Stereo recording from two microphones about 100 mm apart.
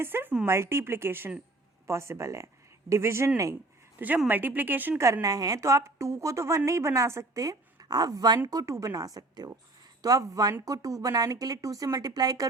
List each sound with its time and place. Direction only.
0.0 s speech: 20° right (ahead or behind)
3.9 s a woman's voice: 15° right (ahead or behind)
5.2 s speech: 35° right (ahead or behind)